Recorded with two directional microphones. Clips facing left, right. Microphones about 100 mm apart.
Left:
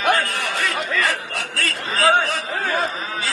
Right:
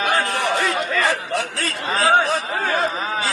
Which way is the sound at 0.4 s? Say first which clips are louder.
Right 4 dB; 25° right (ahead or behind).